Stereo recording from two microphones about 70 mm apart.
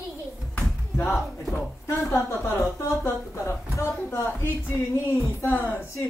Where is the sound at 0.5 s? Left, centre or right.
Left.